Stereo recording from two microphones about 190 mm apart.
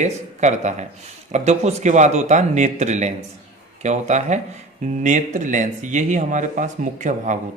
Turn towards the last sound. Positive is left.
turn(degrees=-40)  # may be behind; listen again after turning